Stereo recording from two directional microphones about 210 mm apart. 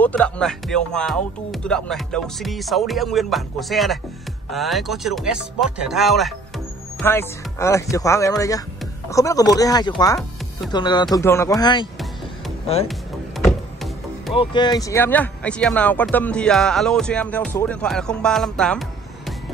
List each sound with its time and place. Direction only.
0.0 s speech: 5° left (ahead or behind)
7.0 s speech: 10° left (ahead or behind)
14.3 s speech: 25° left (ahead or behind); by 19.3 s centre (ahead or behind)